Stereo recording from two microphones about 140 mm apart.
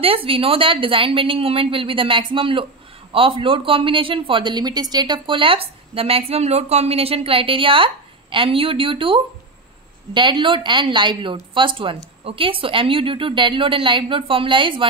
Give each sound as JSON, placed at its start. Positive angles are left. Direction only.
{"t": 0.0, "sound": "speech", "side_deg": -40}